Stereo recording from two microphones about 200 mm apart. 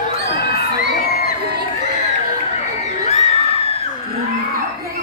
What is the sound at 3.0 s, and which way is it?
Crowd, 30° left (ahead or behind).